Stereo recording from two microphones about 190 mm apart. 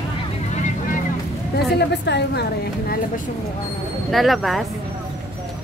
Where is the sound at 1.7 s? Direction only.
60° left (ahead or behind).